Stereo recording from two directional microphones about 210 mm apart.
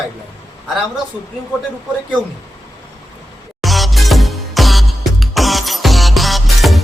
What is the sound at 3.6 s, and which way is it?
Music, centre (ahead or behind).